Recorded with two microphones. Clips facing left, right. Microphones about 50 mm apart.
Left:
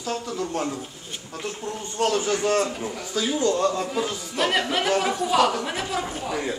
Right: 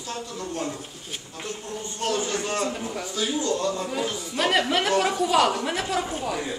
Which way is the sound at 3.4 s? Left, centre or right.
Left.